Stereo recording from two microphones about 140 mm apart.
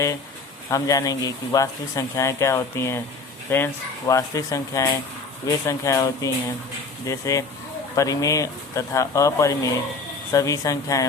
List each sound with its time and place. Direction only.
0.7 s speech: 25° left (ahead or behind)